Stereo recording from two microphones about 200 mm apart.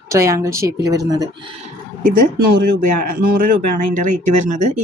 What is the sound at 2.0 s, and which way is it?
Speech, 45° right (ahead or behind).